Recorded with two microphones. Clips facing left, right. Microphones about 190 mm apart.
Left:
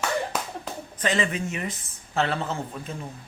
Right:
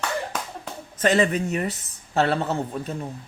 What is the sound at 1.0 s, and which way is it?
Speech, 40° right (ahead or behind).